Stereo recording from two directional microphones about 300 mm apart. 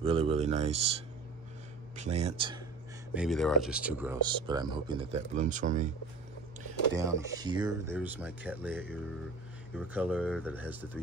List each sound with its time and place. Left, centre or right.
0.0 s speech: centre
3.2 s speech: centre; by 5.9 s right
7.0 s speech: centre